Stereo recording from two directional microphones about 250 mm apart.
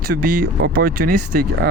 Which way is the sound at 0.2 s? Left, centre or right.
Right.